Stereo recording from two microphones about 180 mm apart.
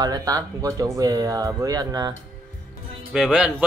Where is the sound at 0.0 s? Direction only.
20° right (ahead or behind).